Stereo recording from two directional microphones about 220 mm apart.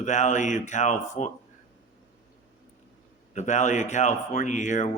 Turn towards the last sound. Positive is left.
turn(degrees=35)  # may be behind; listen again after turning